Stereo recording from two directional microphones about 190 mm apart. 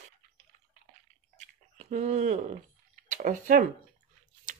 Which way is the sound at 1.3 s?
35° right (ahead or behind).